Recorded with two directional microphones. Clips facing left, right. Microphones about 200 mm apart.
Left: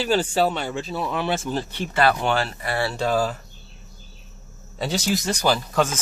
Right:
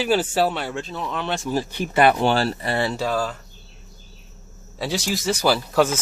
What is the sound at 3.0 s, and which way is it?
Speech, 5° left (ahead or behind).